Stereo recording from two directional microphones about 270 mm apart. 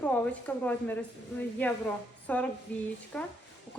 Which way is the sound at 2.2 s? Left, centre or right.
Centre.